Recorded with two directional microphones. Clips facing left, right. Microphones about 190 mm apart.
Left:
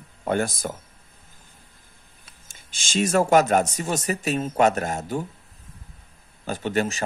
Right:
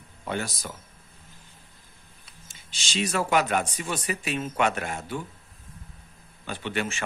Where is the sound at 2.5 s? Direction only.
50° left (ahead or behind).